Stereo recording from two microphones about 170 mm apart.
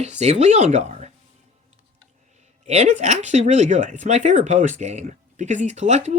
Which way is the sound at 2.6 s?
40° right (ahead or behind).